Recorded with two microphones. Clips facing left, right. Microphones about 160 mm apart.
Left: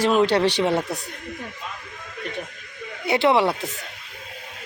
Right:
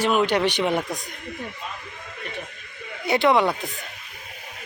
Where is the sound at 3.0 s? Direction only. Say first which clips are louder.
Even; 25° left (ahead or behind).